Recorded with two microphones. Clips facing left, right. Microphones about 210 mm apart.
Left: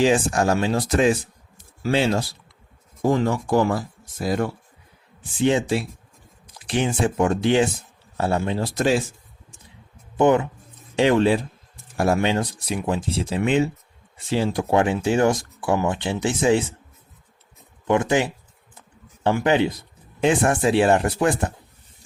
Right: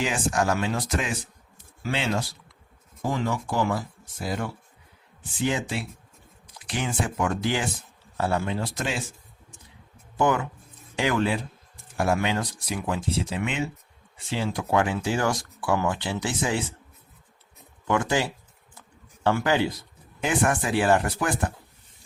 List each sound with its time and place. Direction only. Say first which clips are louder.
0.0 s speech: left 7 dB; 30° left (ahead or behind)
5.4 s speech: left 7 dB; 25° left (ahead or behind)
6.7 s speech: left 7 dB; 25° left (ahead or behind)
10.2 s speech: left 6 dB; 25° left (ahead or behind)
17.8 s speech: left 5 dB; 20° left (ahead or behind)